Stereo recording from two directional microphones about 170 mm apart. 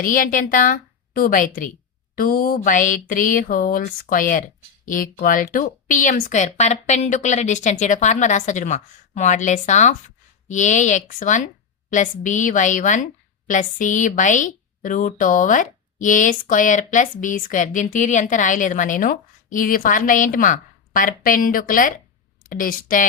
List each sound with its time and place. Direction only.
0.0 s a woman's voice: 55° left (ahead or behind)